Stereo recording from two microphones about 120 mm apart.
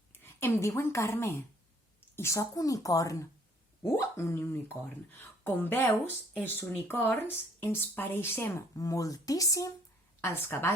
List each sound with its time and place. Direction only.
0.1 s a woman's voice: 20° left (ahead or behind)